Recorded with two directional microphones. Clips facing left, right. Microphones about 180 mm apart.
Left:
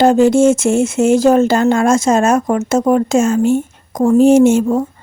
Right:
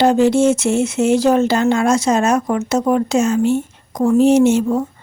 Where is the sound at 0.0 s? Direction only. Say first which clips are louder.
Left 3 dB; 45° left (ahead or behind).